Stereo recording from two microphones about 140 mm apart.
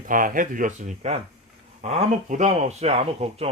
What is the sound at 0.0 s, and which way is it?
Speech, 75° right (ahead or behind).